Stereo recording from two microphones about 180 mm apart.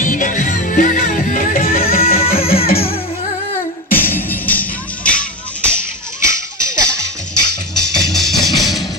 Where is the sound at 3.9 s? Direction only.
10° left (ahead or behind).